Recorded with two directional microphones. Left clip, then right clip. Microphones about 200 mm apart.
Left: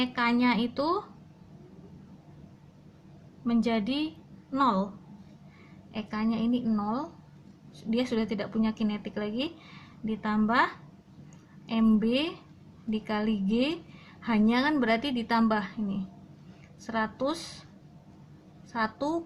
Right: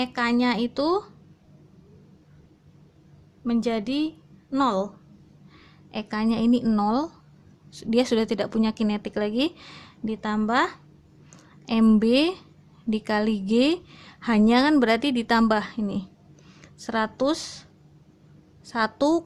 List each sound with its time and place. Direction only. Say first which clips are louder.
0.0 s a woman's voice: right 3 dB; 45° right (ahead or behind)
3.4 s a woman's voice: right 3 dB; 45° right (ahead or behind)
5.9 s a woman's voice: right 5 dB; 50° right (ahead or behind)
18.7 s a woman's voice: right 7 dB; 45° right (ahead or behind)